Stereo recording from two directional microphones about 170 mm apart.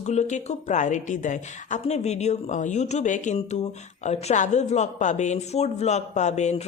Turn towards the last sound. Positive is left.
turn(degrees=40)  # may be behind; listen again after turning